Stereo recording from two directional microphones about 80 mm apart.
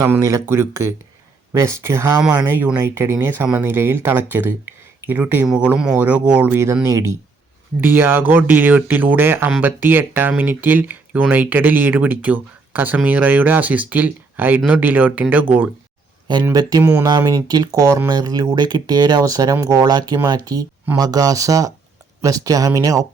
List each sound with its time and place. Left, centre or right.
0.0 s speech: right; by 6.5 s centre
6.5 s speech: right
7.8 s speech: right
16.3 s speech: right
16.8 s speech: right
17.2 s speech: right
19.8 s speech: right